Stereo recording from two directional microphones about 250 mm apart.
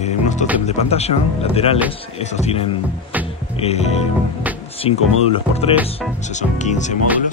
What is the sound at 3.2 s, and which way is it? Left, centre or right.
Music, left.